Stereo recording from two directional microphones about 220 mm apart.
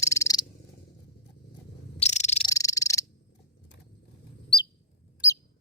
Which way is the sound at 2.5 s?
15° left (ahead or behind).